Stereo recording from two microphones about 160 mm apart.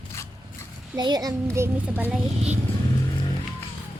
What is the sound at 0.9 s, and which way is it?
A child's voice, 25° right (ahead or behind).